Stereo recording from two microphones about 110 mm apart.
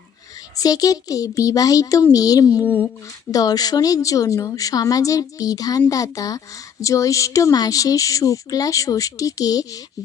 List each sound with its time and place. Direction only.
0.6 s a woman's voice: 35° left (ahead or behind)